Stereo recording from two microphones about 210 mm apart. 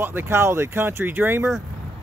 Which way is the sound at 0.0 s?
10° right (ahead or behind).